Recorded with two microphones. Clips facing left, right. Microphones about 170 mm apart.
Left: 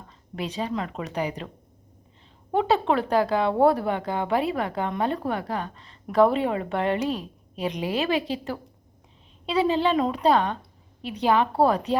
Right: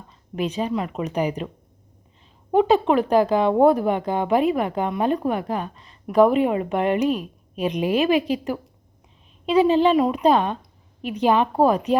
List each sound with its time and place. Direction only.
0.3 s speech: 20° right (ahead or behind)
2.5 s speech: 15° right (ahead or behind)